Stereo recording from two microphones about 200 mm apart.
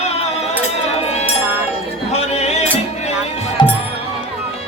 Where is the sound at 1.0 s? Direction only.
35° left (ahead or behind).